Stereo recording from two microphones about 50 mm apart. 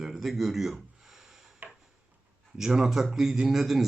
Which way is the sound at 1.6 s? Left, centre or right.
Right.